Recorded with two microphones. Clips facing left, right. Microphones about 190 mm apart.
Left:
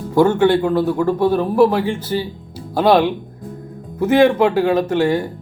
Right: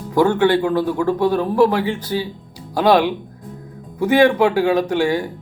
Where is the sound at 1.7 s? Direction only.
5° right (ahead or behind).